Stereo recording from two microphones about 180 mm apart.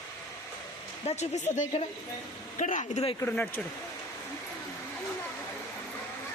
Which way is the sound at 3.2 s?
10° left (ahead or behind).